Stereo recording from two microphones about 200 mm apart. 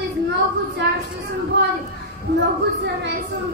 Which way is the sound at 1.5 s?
60° right (ahead or behind).